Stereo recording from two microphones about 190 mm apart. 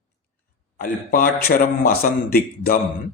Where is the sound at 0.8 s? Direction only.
50° left (ahead or behind).